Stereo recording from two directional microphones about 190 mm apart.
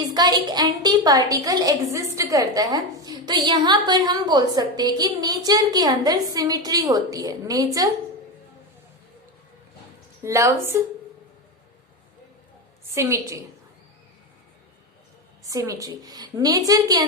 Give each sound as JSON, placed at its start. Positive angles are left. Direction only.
{"t": 0.1, "sound": "a woman's voice", "side_deg": -20}
{"t": 10.2, "sound": "a woman's voice", "side_deg": -15}
{"t": 12.9, "sound": "a woman's voice", "side_deg": -15}
{"t": 15.4, "sound": "a woman's voice", "side_deg": -15}